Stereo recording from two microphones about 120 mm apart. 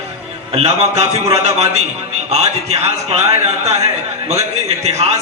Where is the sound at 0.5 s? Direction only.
60° right (ahead or behind).